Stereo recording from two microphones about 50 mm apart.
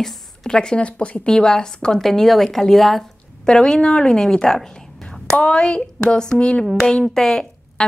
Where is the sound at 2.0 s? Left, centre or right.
Centre.